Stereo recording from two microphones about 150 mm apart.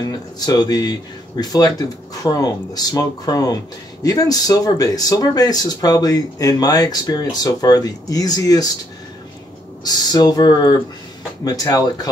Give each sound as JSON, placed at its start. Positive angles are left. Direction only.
{"t": 0.0, "sound": "speech", "side_deg": 25}
{"t": 9.8, "sound": "speech", "side_deg": 25}